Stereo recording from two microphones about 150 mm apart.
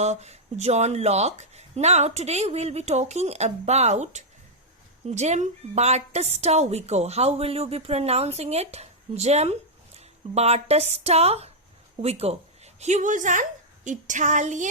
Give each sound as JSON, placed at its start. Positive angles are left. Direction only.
{"t": 0.0, "sound": "a woman's voice", "side_deg": -45}